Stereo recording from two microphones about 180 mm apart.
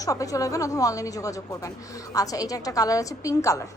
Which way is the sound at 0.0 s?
20° left (ahead or behind).